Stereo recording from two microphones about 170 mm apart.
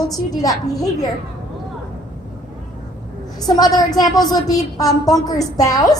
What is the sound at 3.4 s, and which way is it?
A woman's voice, 25° left (ahead or behind).